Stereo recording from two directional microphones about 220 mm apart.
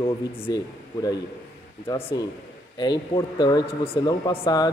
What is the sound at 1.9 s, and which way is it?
Speech, 20° left (ahead or behind).